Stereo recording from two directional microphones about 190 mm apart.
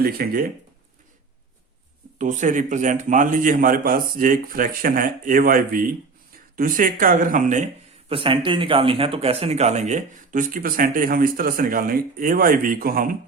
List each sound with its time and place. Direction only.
0.0 s speech: 50° right (ahead or behind)
2.1 s speech: 40° right (ahead or behind)
8.1 s speech: 25° right (ahead or behind); by 13.1 s 50° right (ahead or behind)